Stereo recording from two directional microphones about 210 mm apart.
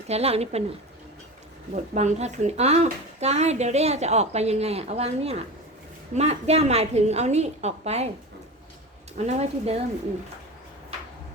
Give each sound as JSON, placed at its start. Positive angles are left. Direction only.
{"t": 0.1, "sound": "a woman's voice", "side_deg": -30}
{"t": 9.1, "sound": "speech", "side_deg": -30}